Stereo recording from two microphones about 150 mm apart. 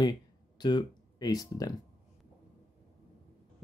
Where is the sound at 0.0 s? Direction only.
30° left (ahead or behind).